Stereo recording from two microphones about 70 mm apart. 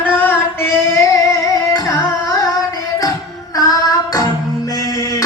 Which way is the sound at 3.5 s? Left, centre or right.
Left.